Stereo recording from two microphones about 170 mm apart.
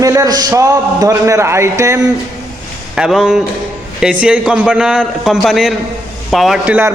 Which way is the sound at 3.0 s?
Centre (ahead or behind).